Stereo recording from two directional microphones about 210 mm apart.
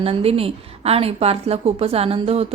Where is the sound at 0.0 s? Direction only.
25° right (ahead or behind).